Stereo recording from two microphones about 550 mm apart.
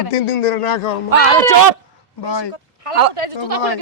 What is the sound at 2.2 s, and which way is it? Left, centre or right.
Speech, left.